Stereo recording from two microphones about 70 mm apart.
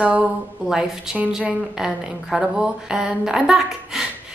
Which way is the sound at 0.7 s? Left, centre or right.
Centre.